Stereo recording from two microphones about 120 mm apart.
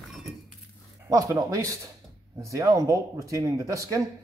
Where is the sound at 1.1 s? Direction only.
30° right (ahead or behind).